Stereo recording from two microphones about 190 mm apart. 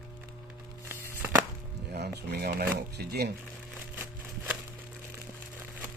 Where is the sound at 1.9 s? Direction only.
60° right (ahead or behind).